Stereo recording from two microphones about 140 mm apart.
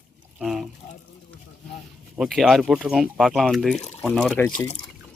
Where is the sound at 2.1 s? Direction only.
Centre (ahead or behind).